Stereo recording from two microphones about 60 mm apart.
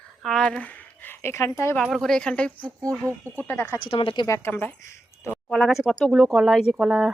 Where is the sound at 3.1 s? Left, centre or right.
Right.